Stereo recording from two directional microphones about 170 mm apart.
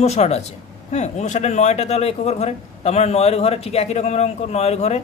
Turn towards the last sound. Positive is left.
turn(degrees=40)  # may be behind; listen again after turning